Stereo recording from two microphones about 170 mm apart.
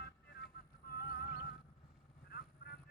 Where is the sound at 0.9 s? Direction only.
65° left (ahead or behind).